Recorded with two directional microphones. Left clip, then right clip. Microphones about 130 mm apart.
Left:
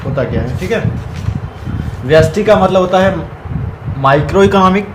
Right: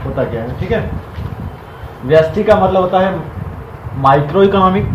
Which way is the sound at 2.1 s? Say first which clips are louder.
Left 1 dB; 40° left (ahead or behind).